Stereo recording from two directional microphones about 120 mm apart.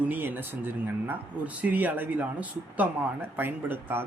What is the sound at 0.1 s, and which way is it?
Speech, 15° right (ahead or behind).